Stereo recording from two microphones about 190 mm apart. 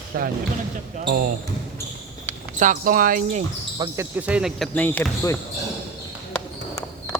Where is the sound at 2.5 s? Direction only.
45° right (ahead or behind).